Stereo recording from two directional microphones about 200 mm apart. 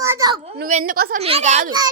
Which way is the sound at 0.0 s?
15° right (ahead or behind).